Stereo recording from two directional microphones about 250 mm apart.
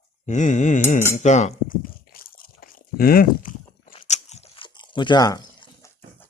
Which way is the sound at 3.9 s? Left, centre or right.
Left.